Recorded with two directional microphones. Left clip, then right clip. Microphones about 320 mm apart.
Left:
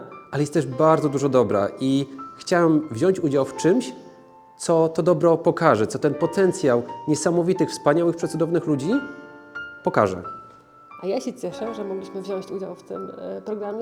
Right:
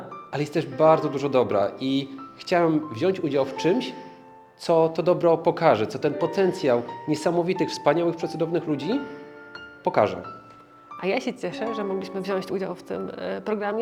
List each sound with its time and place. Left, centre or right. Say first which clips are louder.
0.3 s speech: left 4 dB; left
11.0 s speech: even; centre